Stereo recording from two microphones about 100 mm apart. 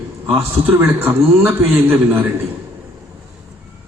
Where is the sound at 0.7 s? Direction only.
20° right (ahead or behind).